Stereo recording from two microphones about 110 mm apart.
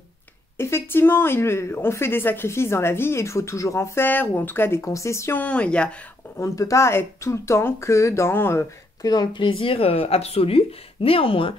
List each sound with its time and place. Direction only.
0.6 s speech: 25° left (ahead or behind)
5.4 s speech: 10° left (ahead or behind)
6.3 s speech: 30° left (ahead or behind)
9.0 s speech: 40° left (ahead or behind); by 11.5 s 55° left (ahead or behind)